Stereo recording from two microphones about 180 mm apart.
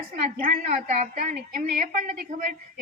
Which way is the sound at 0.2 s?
50° right (ahead or behind).